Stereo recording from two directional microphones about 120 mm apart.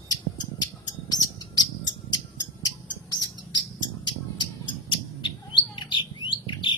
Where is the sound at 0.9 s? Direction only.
35° left (ahead or behind).